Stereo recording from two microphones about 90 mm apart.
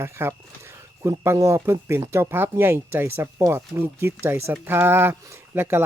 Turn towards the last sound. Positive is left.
turn(degrees=-25)  # may be behind; listen again after turning